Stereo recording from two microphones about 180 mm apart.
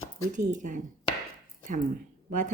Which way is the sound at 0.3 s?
45° right (ahead or behind).